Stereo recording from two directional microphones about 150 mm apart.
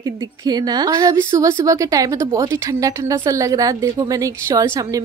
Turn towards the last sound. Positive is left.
turn(degrees=-20)  # may be behind; listen again after turning